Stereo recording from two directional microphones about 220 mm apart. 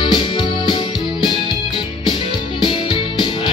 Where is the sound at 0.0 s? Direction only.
20° left (ahead or behind).